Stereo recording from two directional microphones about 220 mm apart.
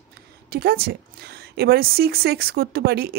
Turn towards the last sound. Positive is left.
turn(degrees=-45)  # may be behind; listen again after turning